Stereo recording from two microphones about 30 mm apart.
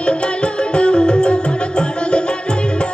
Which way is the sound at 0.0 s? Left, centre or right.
Left.